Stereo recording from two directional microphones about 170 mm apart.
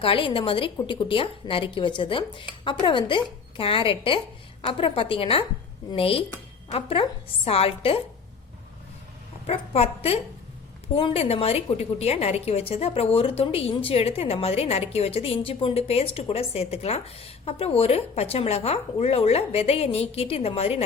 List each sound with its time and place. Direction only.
0.0 s a woman's voice: 30° left (ahead or behind)
9.5 s a woman's voice: 35° left (ahead or behind)